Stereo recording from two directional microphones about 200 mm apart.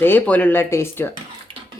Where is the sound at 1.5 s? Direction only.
25° right (ahead or behind).